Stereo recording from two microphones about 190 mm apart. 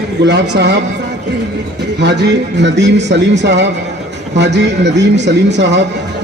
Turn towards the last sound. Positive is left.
turn(degrees=-65)  # may be behind; listen again after turning